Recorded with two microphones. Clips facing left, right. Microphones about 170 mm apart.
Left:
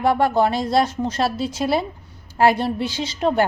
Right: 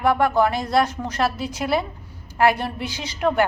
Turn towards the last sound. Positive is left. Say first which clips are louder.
# left 1 dB
turn(degrees=30)  # may be behind; listen again after turning